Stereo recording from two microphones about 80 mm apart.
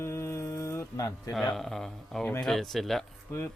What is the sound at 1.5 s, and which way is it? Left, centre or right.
Speech, centre.